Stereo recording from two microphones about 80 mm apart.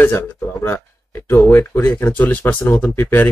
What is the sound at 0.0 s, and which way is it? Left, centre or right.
Speech, left.